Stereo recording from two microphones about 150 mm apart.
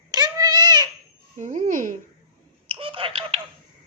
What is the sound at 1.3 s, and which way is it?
Speech, 55° right (ahead or behind).